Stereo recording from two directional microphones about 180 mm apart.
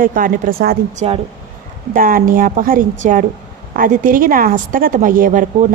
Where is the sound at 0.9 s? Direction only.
40° right (ahead or behind).